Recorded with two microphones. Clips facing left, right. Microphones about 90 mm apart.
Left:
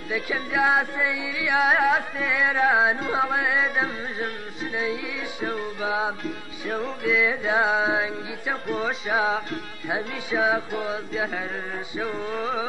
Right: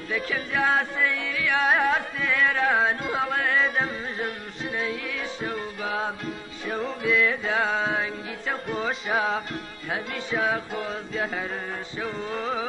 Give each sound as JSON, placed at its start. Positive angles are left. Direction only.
{"t": 0.1, "sound": "carnatic music", "side_deg": 10}
{"t": 6.6, "sound": "music", "side_deg": 0}
{"t": 7.2, "sound": "carnatic music", "side_deg": 15}
{"t": 9.8, "sound": "carnatic music", "side_deg": 15}
{"t": 10.3, "sound": "music", "side_deg": 5}